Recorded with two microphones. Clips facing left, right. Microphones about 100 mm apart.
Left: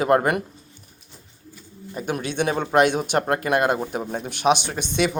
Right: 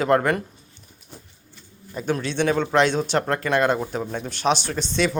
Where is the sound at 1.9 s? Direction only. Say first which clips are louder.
Right 1 dB; 10° left (ahead or behind).